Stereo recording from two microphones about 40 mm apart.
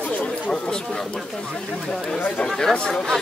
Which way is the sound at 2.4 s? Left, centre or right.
Centre.